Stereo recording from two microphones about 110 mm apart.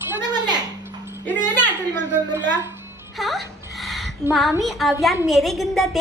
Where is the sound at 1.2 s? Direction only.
15° left (ahead or behind).